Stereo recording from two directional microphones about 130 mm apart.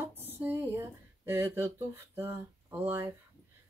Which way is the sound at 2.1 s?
15° right (ahead or behind).